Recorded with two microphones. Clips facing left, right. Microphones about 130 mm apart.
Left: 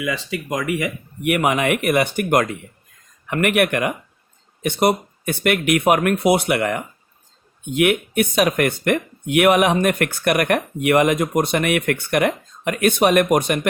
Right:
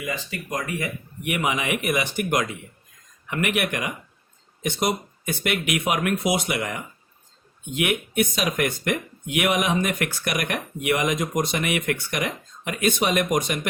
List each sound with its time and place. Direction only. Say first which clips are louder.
0.0 s speech: left 6 dB; 90° left; by 13.6 s 60° left (ahead or behind)